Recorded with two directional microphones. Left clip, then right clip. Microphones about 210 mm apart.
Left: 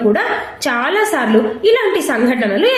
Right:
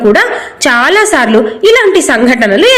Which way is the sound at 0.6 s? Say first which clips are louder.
Right 9 dB; 40° right (ahead or behind).